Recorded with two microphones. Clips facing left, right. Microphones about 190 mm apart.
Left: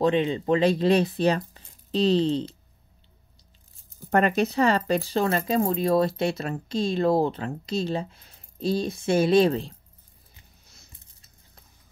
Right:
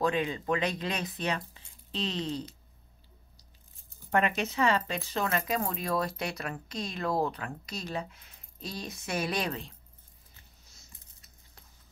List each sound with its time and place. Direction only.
0.0 s speech: 25° left (ahead or behind)
4.1 s speech: 40° left (ahead or behind)